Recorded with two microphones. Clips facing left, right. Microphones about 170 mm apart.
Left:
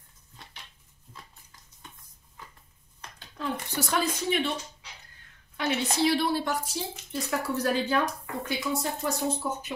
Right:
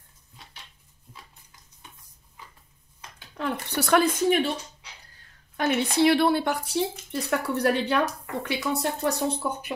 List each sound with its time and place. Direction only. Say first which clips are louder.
3.3 s speech: right 3 dB; 65° right (ahead or behind); by 4.5 s 45° right (ahead or behind)
5.6 s speech: right 4 dB; 55° right (ahead or behind)